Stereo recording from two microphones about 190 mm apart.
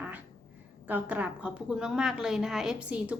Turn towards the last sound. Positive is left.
turn(degrees=-5)  # may be behind; listen again after turning